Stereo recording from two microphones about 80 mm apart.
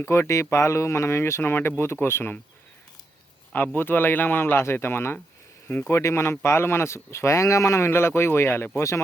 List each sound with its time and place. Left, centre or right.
0.0 s speech: left
3.5 s speech: left